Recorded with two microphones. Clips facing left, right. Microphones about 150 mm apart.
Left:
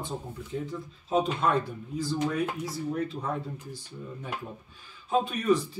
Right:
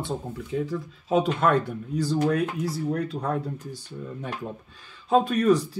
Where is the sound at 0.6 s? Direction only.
90° right; by 3.4 s 70° right (ahead or behind).